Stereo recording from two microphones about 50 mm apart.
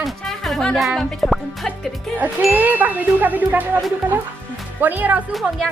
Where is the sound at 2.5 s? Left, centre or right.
Right.